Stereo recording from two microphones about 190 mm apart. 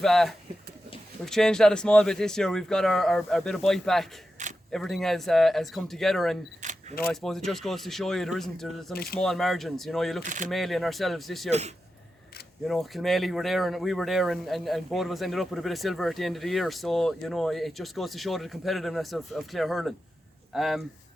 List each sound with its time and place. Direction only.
0.0 s speech: centre (ahead or behind)
6.6 s single-lens reflex camera: 40° right (ahead or behind)
7.1 s speech: centre (ahead or behind)
10.2 s speech: 40° right (ahead or behind)
10.5 s speech: centre (ahead or behind)
12.6 s speech: centre (ahead or behind)